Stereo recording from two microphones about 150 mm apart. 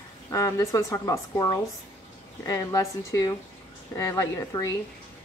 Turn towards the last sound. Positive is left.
turn(degrees=25)  # may be behind; listen again after turning